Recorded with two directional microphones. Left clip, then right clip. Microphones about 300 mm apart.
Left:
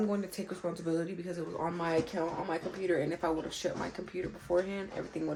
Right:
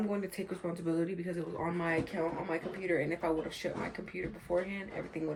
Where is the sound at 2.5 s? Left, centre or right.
Centre.